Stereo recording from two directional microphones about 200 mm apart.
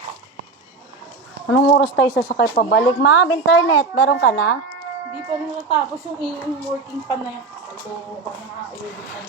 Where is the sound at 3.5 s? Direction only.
85° left.